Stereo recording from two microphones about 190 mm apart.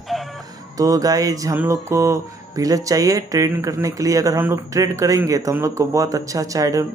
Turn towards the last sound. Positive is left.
turn(degrees=-15)  # may be behind; listen again after turning